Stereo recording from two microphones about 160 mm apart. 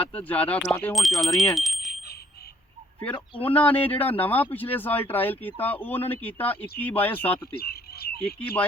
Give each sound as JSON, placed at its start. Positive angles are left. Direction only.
{"t": 0.0, "sound": "speech", "side_deg": 10}
{"t": 3.4, "sound": "speech", "side_deg": 10}
{"t": 7.5, "sound": "a sound", "side_deg": 75}